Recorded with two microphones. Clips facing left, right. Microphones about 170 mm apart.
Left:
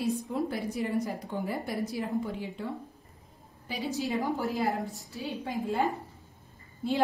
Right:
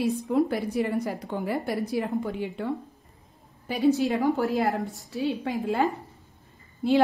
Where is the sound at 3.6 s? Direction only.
60° right (ahead or behind).